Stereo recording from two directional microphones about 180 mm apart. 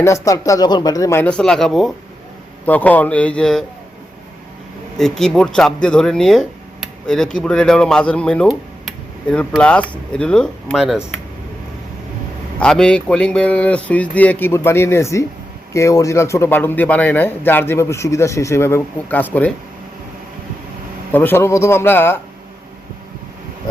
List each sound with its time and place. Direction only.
0.0 s speech: 15° left (ahead or behind)
1.2 s a man's voice: 5° left (ahead or behind)
4.9 s speech: centre (ahead or behind)
12.5 s a man's voice: 5° left (ahead or behind)
21.1 s a man's voice: 10° left (ahead or behind)